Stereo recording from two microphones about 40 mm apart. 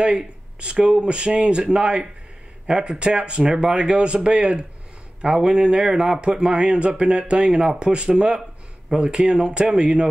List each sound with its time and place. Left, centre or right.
0.0 s speech: right